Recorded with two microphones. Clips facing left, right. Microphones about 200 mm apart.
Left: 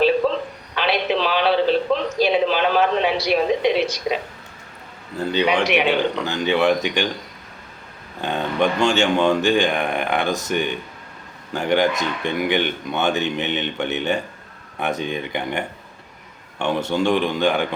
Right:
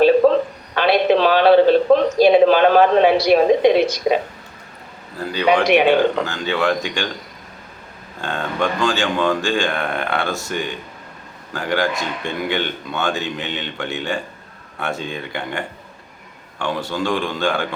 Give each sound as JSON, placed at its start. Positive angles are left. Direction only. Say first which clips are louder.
{"t": 0.0, "sound": "a sound", "louder": "right 6 dB", "side_deg": -50}
{"t": 5.6, "sound": "speech", "louder": "right 5 dB", "side_deg": -45}
{"t": 6.2, "sound": "speech", "louder": "left 2 dB", "side_deg": 20}
{"t": 8.2, "sound": "speech", "louder": "left 2 dB", "side_deg": 20}